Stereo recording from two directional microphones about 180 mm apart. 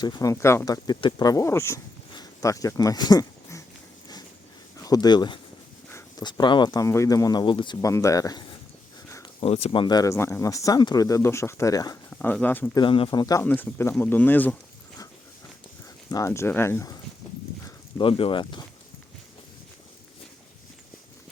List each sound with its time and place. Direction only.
0.0 s speech: 20° left (ahead or behind)
4.8 s speech: 20° left (ahead or behind)
9.0 s a sound: 15° left (ahead or behind)
9.4 s speech: 35° left (ahead or behind)
12.2 s speech: 10° left (ahead or behind)
12.7 s speech: 25° left (ahead or behind)
13.4 s speech: 10° left (ahead or behind)
16.0 s speech: 15° left (ahead or behind)
17.7 s speech: 25° left (ahead or behind)